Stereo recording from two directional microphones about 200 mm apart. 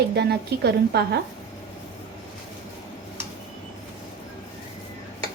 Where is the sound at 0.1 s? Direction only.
55° right (ahead or behind).